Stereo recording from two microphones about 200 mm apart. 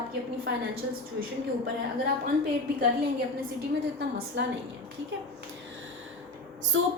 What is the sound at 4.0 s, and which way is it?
Speech, 60° right (ahead or behind).